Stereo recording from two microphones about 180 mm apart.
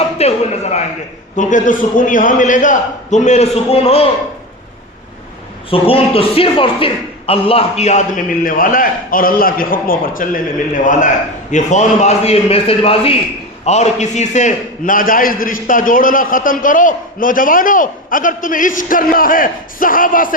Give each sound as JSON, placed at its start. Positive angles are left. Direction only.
{"t": 0.2, "sound": "a sound", "side_deg": 35}
{"t": 1.4, "sound": "a man's voice", "side_deg": 45}
{"t": 5.7, "sound": "a man's voice", "side_deg": 30}